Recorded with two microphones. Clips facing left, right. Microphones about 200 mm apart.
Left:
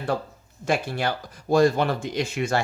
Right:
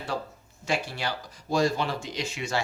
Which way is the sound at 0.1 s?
50° left (ahead or behind).